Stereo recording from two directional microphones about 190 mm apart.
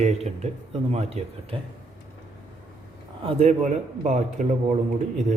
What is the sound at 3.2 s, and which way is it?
A man's voice, 35° right (ahead or behind).